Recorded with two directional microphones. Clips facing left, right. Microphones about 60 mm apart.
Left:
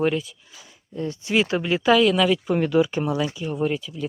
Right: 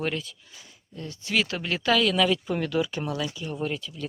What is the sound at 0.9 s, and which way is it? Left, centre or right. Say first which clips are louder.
Speech: left 5 dB; left.